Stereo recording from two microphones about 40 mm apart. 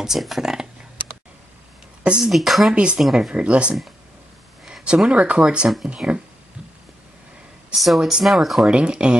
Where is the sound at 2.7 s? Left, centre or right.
Right.